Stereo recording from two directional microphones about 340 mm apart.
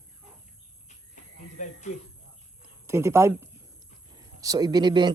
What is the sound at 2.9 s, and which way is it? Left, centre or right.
Speech, centre.